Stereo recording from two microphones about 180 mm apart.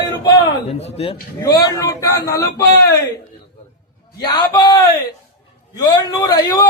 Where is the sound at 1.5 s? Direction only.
20° left (ahead or behind).